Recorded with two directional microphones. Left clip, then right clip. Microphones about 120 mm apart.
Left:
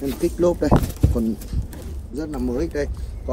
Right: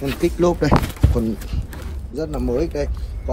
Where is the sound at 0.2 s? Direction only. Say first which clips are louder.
Right 1 dB; 40° right (ahead or behind).